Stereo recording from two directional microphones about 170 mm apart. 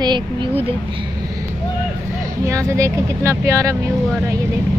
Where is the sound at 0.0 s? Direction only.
25° right (ahead or behind).